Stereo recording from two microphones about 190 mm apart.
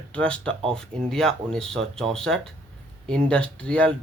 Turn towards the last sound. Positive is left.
turn(degrees=5)  # may be behind; listen again after turning